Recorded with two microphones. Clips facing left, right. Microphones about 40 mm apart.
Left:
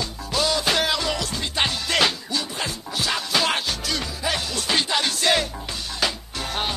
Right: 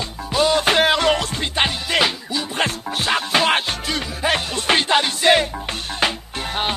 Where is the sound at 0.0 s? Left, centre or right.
Right.